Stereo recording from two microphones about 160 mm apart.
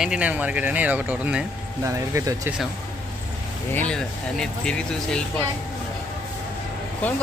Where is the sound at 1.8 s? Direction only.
20° right (ahead or behind).